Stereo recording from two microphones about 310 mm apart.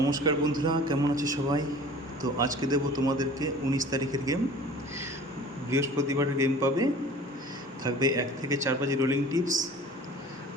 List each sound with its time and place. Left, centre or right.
0.0 s speech: centre
5.7 s speech: centre
7.9 s speech: centre
9.4 s speech: right